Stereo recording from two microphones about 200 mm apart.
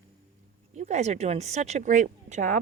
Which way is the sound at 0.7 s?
35° right (ahead or behind).